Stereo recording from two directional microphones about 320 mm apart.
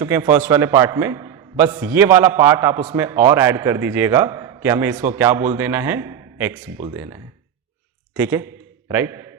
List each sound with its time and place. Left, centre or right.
0.0 s a man's voice: centre